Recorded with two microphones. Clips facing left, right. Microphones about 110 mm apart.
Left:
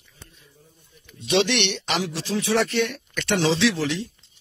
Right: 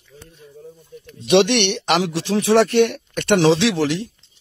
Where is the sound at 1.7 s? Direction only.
70° right (ahead or behind).